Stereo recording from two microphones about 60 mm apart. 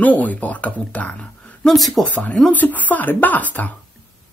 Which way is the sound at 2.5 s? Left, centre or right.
Left.